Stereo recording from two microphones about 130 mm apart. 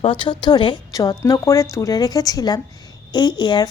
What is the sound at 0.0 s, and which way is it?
A woman's voice, 40° left (ahead or behind).